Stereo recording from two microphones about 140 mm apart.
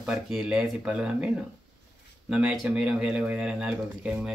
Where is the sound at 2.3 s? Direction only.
5° right (ahead or behind).